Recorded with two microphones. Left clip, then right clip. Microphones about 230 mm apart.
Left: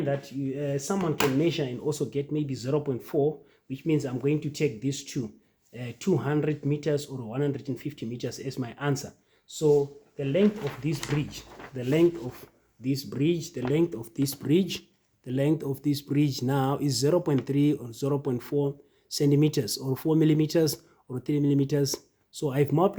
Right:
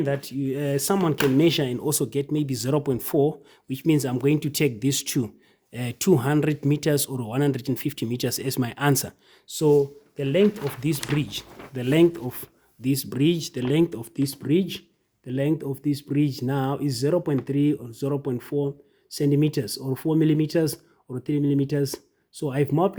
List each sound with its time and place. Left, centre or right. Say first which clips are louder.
0.0 s speech: right 3 dB; right; by 22.9 s centre